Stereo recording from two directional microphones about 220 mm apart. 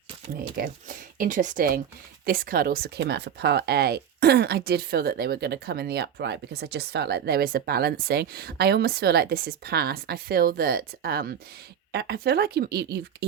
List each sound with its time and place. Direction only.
0.5 s speech: 40° right (ahead or behind)